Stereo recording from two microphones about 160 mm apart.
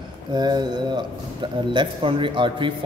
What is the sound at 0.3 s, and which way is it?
A man's voice, 25° right (ahead or behind).